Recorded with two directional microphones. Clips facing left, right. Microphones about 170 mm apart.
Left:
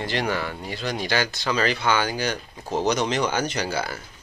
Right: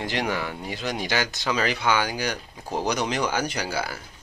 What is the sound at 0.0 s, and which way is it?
Speech, 15° right (ahead or behind).